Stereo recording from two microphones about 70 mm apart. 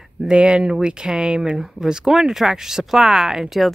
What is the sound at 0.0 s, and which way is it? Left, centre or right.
Speech, centre.